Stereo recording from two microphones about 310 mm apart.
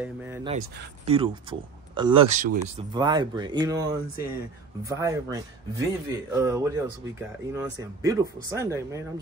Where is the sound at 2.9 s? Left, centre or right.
Centre.